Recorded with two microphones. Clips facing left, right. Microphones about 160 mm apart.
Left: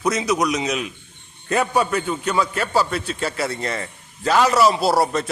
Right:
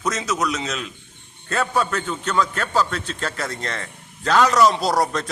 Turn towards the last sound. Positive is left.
turn(degrees=5)  # may be behind; listen again after turning